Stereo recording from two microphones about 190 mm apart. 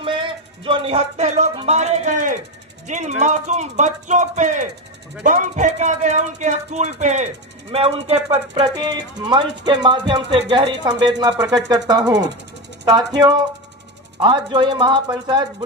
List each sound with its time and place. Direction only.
0.0 s speech: 25° right (ahead or behind)
8.7 s speech: 20° right (ahead or behind)